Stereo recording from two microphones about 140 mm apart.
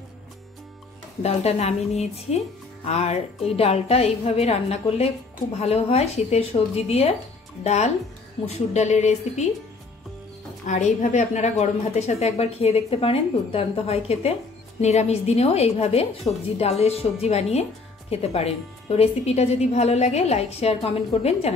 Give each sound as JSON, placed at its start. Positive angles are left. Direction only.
{"t": 1.2, "sound": "a woman's voice", "side_deg": 50}
{"t": 10.7, "sound": "a woman's voice", "side_deg": 60}